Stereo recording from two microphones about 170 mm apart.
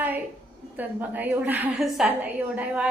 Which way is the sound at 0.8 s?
10° right (ahead or behind).